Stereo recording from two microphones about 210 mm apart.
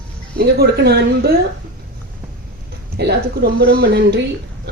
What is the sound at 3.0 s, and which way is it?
A woman's voice, 50° right (ahead or behind).